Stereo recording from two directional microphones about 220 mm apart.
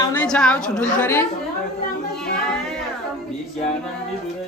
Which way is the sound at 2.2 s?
5° left (ahead or behind).